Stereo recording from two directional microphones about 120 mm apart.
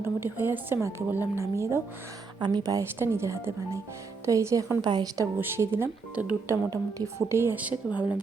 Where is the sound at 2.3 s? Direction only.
35° right (ahead or behind).